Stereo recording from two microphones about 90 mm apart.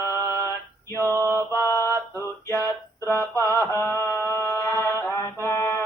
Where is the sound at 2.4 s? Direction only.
25° left (ahead or behind).